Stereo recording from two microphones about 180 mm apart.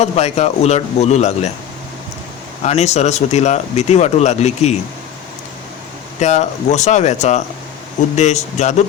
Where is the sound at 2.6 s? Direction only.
35° left (ahead or behind).